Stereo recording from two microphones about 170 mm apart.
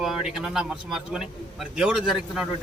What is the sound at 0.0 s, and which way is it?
A man's voice, 5° right (ahead or behind).